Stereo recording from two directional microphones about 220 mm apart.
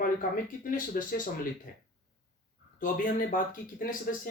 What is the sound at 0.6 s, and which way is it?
Speech, 40° left (ahead or behind).